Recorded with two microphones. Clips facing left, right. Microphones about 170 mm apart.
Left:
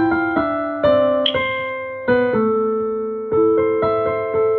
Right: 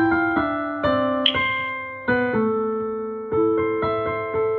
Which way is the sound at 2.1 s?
45° left (ahead or behind).